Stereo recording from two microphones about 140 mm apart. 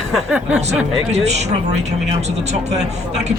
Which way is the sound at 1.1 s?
50° right (ahead or behind).